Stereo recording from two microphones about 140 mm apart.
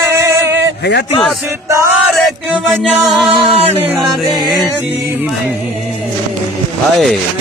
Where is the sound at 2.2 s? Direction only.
5° right (ahead or behind).